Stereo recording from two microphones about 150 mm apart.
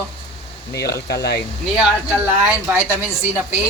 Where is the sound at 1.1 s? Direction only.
90° left.